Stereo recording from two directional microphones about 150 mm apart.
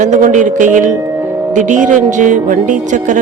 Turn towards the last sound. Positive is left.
turn(degrees=-55)  # may be behind; listen again after turning